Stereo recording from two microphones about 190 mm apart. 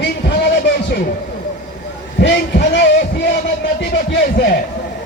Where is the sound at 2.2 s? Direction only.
65° left (ahead or behind).